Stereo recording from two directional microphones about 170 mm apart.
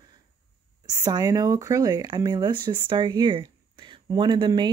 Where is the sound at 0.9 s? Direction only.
20° right (ahead or behind).